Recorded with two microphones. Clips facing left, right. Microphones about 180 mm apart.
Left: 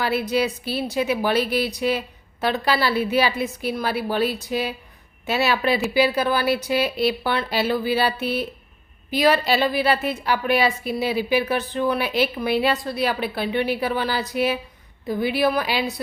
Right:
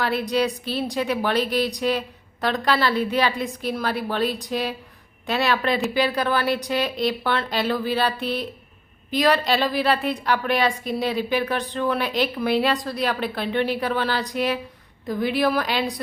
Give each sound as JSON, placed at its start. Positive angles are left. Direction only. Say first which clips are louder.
{"t": 0.0, "sound": "a woman's voice", "louder": "even", "side_deg": 5}